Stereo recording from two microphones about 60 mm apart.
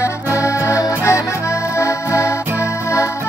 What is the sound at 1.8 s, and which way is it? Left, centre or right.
Music, left.